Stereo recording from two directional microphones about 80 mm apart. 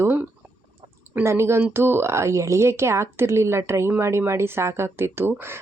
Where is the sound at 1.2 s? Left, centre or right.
Right.